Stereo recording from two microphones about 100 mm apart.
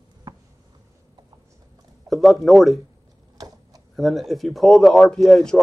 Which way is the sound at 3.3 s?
40° right (ahead or behind).